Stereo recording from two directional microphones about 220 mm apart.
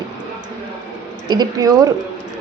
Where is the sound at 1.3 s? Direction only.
15° right (ahead or behind).